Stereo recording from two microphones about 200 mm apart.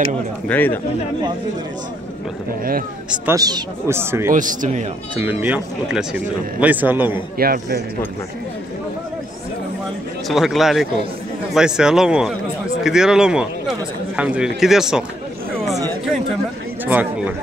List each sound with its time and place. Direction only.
0.5 s speech: 10° left (ahead or behind)
3.1 s speech: 15° right (ahead or behind)
4.3 s speech: 40° right (ahead or behind)
5.2 s speech: 10° right (ahead or behind)
7.3 s a man's voice: 50° right (ahead or behind)
10.2 s speech: centre (ahead or behind)
16.8 s a sound: 10° right (ahead or behind)